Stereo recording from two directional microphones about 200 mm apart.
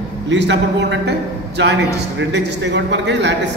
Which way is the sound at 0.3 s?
60° right (ahead or behind).